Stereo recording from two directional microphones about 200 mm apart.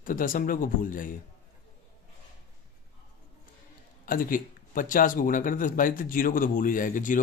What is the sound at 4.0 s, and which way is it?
Speech, 45° left (ahead or behind).